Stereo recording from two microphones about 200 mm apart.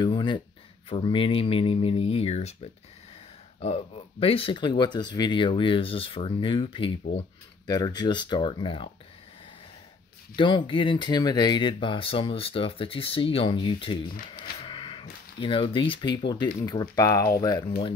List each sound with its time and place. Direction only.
0.0 s speech: 25° left (ahead or behind)
3.5 s speech: 30° left (ahead or behind)
10.3 s speech: 25° left (ahead or behind)